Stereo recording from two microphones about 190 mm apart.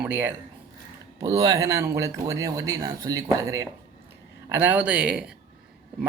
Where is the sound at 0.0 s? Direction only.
10° right (ahead or behind).